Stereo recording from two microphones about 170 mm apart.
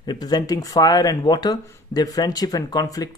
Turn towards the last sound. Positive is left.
turn(degrees=20)  # may be behind; listen again after turning